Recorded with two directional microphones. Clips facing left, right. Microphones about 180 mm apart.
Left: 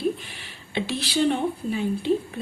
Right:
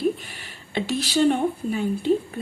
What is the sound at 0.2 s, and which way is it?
A woman's voice, 45° right (ahead or behind).